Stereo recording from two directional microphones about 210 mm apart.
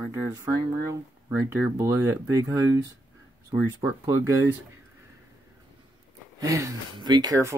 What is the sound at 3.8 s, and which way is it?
Speech, 15° right (ahead or behind).